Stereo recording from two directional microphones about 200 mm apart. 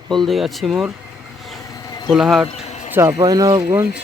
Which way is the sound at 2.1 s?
Centre (ahead or behind).